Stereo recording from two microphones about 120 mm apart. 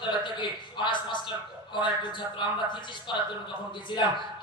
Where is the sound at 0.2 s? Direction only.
40° left (ahead or behind).